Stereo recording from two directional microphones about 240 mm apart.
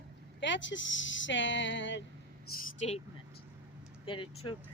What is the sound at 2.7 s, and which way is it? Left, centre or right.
Speech, left.